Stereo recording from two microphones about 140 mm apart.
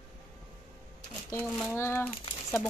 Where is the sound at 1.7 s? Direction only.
15° left (ahead or behind).